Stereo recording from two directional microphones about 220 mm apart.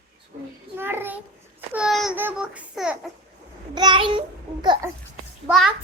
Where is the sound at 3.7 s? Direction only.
20° right (ahead or behind).